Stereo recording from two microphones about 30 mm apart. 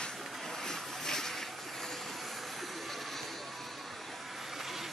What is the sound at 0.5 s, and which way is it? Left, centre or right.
Vehicle, centre.